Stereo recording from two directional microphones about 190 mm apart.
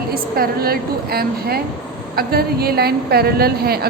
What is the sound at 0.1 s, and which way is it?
A woman's voice, 55° right (ahead or behind).